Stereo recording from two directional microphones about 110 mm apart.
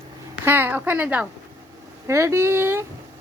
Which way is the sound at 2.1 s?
25° right (ahead or behind).